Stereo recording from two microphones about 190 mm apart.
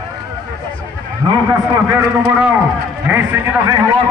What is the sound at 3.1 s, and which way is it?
Speech, 10° right (ahead or behind).